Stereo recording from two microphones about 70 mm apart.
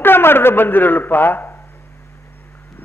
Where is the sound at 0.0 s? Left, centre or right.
Left.